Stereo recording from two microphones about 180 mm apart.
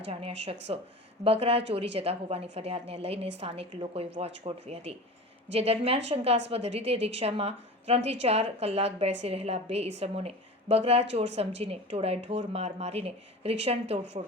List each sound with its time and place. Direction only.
0.1 s a woman's voice: 35° right (ahead or behind)